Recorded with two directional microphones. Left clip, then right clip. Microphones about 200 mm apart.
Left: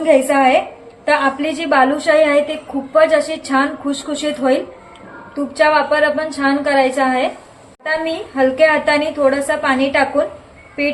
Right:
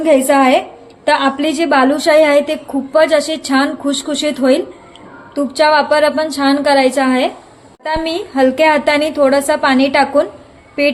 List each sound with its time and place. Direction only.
0.0 s a woman's voice: 55° right (ahead or behind)